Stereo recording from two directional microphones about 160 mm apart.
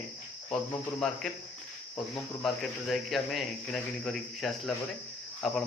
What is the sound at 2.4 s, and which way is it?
Speech, centre (ahead or behind).